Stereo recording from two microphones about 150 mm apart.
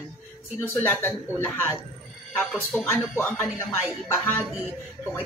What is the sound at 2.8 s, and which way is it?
Speech, 15° left (ahead or behind).